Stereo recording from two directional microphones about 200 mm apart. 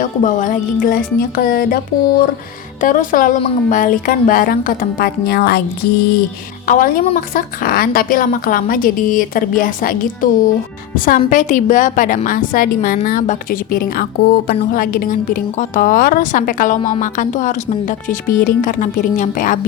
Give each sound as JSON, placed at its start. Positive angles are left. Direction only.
{"t": 0.0, "sound": "a woman's voice", "side_deg": 40}
{"t": 6.7, "sound": "a woman's voice", "side_deg": 45}